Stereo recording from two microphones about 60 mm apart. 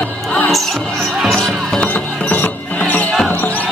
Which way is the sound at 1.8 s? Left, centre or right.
Left.